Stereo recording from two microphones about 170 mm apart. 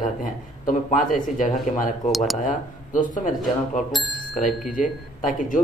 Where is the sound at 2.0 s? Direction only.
Centre (ahead or behind).